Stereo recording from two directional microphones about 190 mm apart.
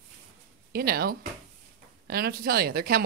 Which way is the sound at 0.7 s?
55° right (ahead or behind).